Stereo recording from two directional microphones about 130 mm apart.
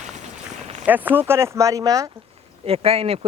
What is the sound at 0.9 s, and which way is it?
Speech, 15° right (ahead or behind).